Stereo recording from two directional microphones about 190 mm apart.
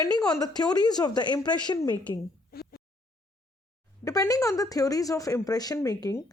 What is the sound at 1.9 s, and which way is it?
Speech, 10° left (ahead or behind).